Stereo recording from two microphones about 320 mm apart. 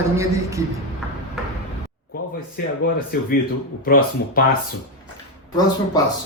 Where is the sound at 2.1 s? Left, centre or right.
Left.